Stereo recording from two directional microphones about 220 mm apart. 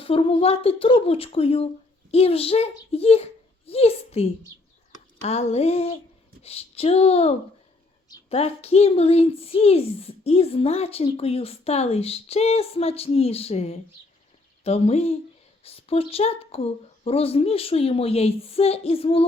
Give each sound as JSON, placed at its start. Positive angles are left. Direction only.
{"t": 0.0, "sound": "a woman's voice", "side_deg": 25}